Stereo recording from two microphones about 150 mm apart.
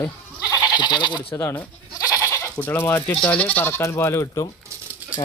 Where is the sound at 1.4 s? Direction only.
20° left (ahead or behind).